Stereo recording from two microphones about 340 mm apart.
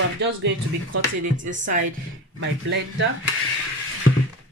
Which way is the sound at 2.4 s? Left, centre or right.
Right.